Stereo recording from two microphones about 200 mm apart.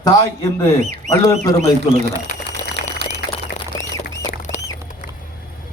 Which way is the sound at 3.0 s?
55° right (ahead or behind).